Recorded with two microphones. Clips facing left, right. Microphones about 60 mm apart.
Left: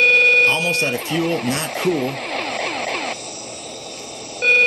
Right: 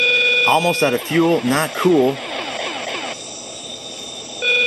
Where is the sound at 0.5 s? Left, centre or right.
Right.